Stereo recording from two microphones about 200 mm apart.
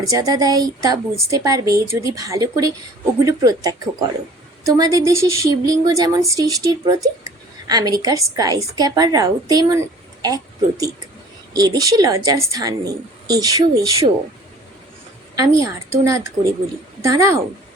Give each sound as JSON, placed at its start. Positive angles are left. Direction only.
{"t": 0.0, "sound": "speech", "side_deg": -20}
{"t": 15.4, "sound": "speech", "side_deg": -15}